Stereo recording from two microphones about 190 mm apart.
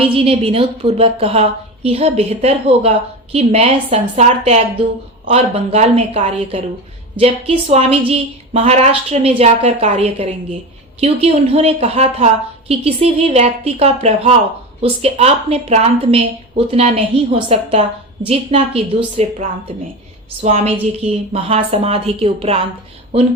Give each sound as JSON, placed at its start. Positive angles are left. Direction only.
{"t": 0.1, "sound": "a woman's voice", "side_deg": -30}